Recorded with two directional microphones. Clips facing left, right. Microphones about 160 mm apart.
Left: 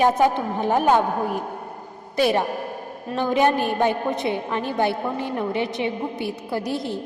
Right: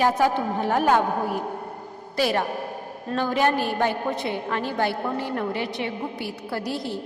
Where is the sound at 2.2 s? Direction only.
20° left (ahead or behind).